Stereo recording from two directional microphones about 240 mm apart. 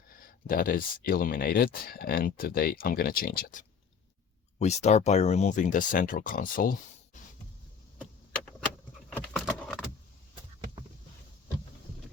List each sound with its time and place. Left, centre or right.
0.1 s speech: left
9.0 s keys jangling: centre